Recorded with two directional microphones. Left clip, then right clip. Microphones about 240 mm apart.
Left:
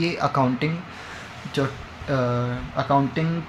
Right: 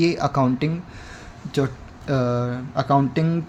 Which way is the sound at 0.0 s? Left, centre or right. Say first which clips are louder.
Right 2 dB; right.